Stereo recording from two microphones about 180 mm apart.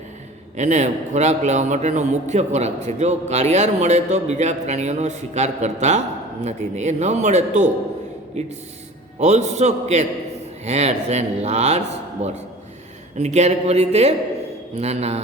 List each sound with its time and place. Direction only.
0.5 s a man's voice: 40° right (ahead or behind)